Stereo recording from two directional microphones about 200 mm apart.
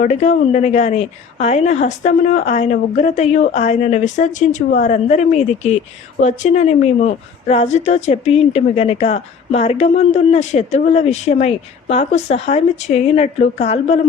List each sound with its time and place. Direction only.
0.0 s a woman's voice: 35° left (ahead or behind)